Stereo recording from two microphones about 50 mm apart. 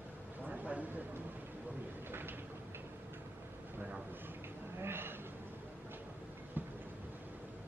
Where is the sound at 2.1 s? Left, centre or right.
Right.